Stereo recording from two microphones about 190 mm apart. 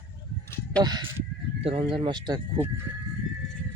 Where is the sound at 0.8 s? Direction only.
20° right (ahead or behind).